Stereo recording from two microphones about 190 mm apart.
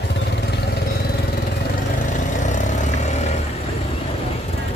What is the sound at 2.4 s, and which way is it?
Vehicle, 40° left (ahead or behind).